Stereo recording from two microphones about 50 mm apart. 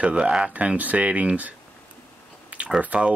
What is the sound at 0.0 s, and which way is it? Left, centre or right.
Speech, right.